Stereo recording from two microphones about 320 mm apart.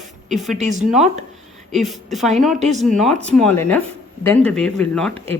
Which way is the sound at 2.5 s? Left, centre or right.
Right.